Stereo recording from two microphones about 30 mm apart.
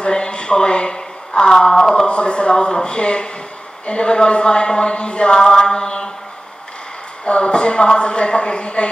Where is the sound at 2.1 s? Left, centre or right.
Left.